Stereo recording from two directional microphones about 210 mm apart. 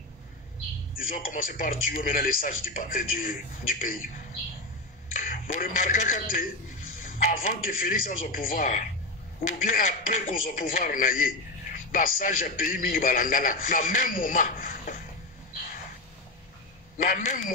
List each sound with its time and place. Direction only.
1.1 s a man's voice: 40° left (ahead or behind)
17.0 s a man's voice: 40° left (ahead or behind)